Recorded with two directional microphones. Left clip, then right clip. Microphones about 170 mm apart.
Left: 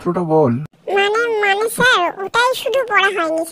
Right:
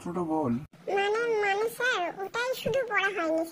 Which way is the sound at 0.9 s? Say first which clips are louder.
Left 11 dB; 40° left (ahead or behind).